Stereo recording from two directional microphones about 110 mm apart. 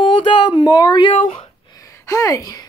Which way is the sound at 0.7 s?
35° left (ahead or behind).